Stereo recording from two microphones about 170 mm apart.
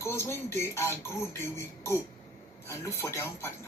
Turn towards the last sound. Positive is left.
turn(degrees=15)  # may be behind; listen again after turning